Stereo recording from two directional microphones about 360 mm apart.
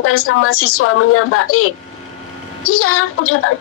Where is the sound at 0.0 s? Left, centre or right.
Left.